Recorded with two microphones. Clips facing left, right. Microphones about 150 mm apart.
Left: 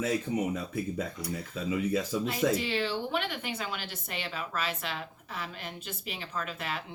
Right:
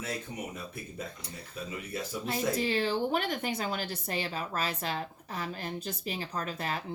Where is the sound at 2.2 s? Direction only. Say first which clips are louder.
Left 2 dB; 40° right (ahead or behind).